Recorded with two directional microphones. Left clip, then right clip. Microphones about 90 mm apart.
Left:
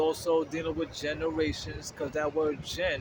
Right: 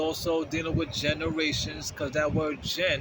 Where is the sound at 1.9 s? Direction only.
15° left (ahead or behind).